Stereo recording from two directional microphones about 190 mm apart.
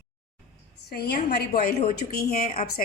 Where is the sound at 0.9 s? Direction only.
55° left (ahead or behind).